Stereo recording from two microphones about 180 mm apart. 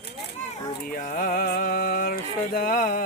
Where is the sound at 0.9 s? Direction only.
50° left (ahead or behind).